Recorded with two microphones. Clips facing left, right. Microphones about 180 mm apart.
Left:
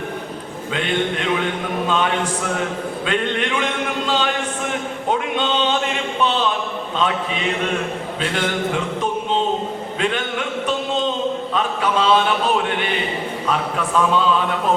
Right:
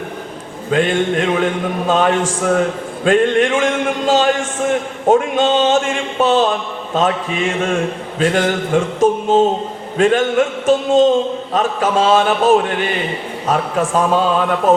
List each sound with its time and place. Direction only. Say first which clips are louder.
0.7 s a man's voice: right 7 dB; 45° right (ahead or behind)